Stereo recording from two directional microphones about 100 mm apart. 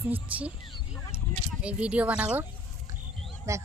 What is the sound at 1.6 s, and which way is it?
Speech, 10° right (ahead or behind).